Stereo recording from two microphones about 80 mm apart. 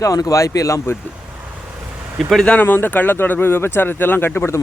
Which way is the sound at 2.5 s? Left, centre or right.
Left.